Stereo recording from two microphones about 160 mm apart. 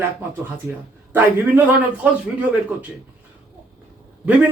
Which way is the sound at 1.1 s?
15° right (ahead or behind).